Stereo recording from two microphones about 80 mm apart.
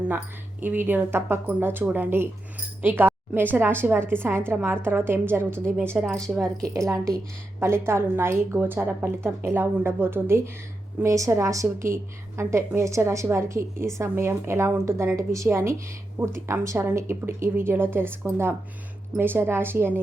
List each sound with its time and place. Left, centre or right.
0.6 s a woman's voice: right
6.0 s a woman's voice: centre
6.6 s speech: right
7.6 s a woman's voice: right